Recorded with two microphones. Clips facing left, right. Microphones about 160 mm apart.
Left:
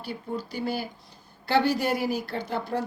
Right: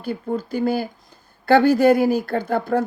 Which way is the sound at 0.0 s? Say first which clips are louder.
Right 8 dB; 50° right (ahead or behind).